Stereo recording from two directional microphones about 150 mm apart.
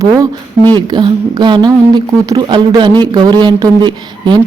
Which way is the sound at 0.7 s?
30° right (ahead or behind).